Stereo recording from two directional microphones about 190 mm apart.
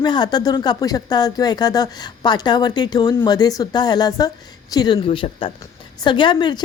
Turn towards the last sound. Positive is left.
turn(degrees=25)  # may be behind; listen again after turning